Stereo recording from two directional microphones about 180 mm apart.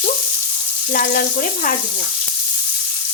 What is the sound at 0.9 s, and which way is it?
Frying, 50° left (ahead or behind).